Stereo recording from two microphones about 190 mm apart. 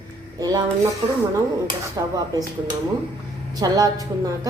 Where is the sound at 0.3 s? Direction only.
20° right (ahead or behind).